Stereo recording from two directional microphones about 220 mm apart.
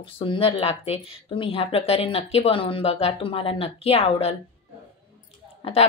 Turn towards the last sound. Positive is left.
turn(degrees=25)  # may be behind; listen again after turning